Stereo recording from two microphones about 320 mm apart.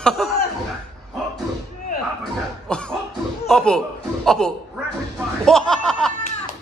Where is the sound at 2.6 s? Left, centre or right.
Centre.